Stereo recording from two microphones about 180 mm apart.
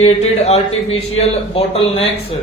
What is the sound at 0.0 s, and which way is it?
A man's voice, 35° left (ahead or behind).